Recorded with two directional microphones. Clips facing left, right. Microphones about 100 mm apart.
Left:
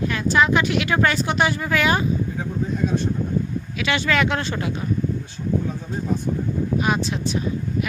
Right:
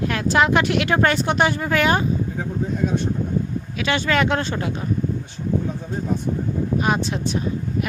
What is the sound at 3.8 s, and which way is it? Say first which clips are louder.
Speech: right 1 dB; 40° right (ahead or behind).